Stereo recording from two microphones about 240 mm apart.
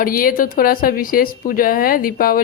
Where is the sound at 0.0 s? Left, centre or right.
Left.